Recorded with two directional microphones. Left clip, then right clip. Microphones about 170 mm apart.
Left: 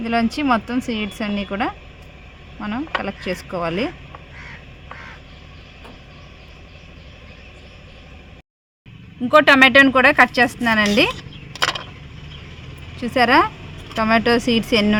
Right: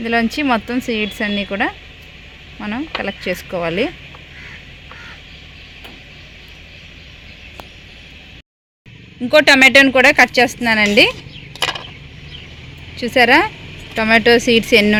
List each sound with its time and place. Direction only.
0.0 s speech: 15° right (ahead or behind)
9.3 s speech: 5° right (ahead or behind)
13.0 s speech: 10° right (ahead or behind)